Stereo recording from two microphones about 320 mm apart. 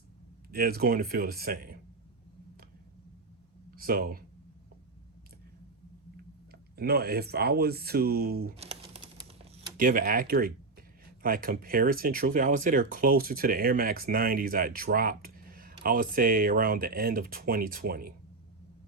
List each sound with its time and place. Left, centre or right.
0.5 s speech: right
3.7 s a sound: right
6.5 s speech: right